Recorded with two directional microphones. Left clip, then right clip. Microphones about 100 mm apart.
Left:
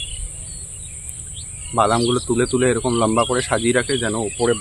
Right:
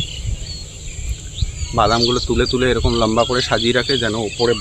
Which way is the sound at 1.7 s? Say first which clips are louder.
Right 2 dB; 25° left (ahead or behind).